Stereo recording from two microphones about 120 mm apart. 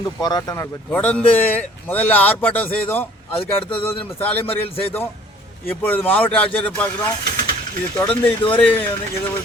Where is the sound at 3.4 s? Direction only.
50° left (ahead or behind).